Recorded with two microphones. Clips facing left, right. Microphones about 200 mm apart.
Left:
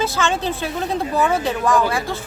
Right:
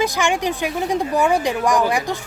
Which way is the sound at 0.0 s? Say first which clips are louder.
Right 1 dB; 15° right (ahead or behind).